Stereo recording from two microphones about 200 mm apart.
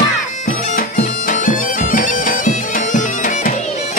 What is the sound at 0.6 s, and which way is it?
Bagpipes, 40° left (ahead or behind).